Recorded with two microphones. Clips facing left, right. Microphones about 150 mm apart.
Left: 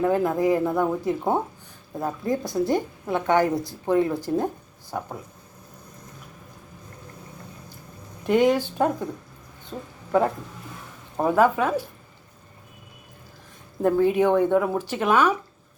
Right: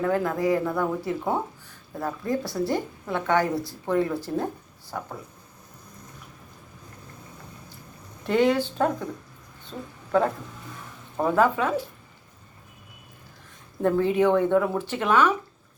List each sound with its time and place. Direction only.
0.0 s a woman's voice: 20° left (ahead or behind)
8.3 s speech: 15° left (ahead or behind)
11.2 s speech: 15° left (ahead or behind)
13.8 s speech: 15° left (ahead or behind)